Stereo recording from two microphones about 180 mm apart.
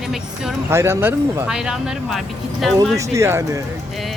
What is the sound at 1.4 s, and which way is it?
Speech, 5° right (ahead or behind).